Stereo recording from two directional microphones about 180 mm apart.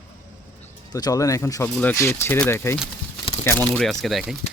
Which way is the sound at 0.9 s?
20° left (ahead or behind).